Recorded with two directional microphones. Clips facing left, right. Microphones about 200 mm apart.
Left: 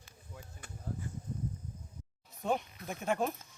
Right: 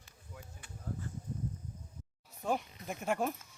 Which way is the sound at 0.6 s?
45° left (ahead or behind).